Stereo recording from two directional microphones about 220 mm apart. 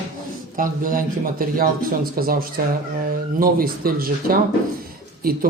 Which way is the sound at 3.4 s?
40° right (ahead or behind).